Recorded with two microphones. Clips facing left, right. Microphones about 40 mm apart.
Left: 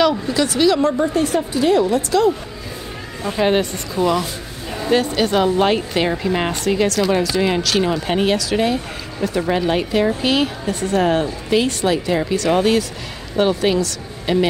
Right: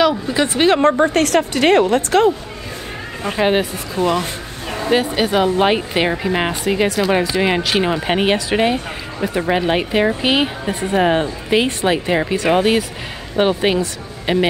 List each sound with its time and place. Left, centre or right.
0.3 s speech: right
1.1 s a woman's voice: right
3.3 s speech: centre